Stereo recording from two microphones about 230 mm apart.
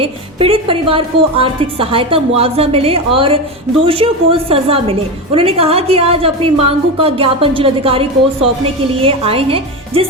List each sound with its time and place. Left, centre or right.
0.0 s a woman's voice: right